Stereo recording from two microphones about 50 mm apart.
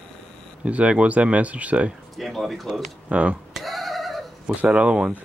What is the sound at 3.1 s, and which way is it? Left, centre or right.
Speech, right.